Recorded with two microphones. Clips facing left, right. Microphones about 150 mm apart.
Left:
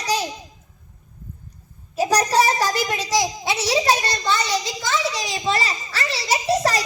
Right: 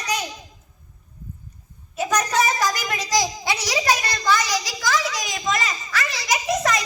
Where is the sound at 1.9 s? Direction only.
35° left (ahead or behind).